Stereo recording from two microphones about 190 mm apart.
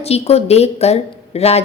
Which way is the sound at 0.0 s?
35° left (ahead or behind).